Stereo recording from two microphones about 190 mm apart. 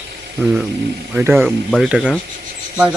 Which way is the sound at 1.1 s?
10° right (ahead or behind).